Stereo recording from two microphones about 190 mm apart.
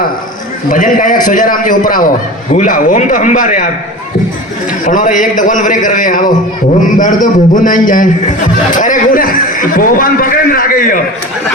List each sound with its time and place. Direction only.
0.7 s a man's voice: 45° left (ahead or behind)
4.9 s a man's voice: 45° left (ahead or behind)